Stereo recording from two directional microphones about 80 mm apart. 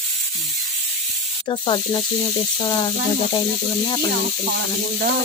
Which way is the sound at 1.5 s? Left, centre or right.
Left.